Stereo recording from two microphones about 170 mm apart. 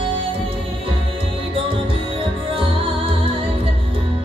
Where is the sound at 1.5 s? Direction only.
30° right (ahead or behind).